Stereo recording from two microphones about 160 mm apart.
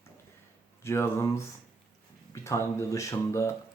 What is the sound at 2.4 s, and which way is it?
Speech, 20° left (ahead or behind).